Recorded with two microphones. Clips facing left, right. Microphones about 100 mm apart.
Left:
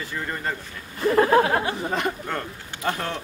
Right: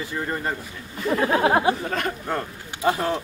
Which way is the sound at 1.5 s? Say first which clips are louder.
Right 5 dB; 20° right (ahead or behind).